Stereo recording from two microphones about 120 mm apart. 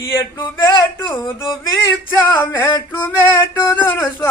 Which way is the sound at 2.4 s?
20° left (ahead or behind).